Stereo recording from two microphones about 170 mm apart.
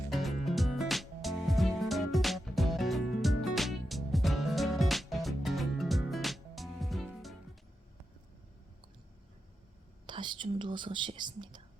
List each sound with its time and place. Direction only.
0.1 s music: centre (ahead or behind)
10.1 s speech: 25° right (ahead or behind)